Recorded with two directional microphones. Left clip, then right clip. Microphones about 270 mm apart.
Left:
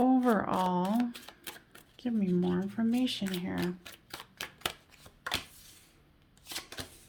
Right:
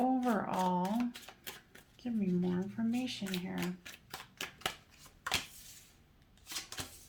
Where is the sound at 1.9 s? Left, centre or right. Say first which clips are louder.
Left 5 dB; left.